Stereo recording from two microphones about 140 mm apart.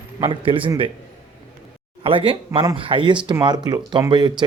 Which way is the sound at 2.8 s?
35° right (ahead or behind).